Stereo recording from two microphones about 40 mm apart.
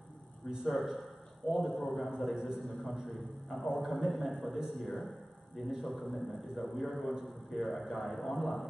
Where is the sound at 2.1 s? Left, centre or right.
Centre.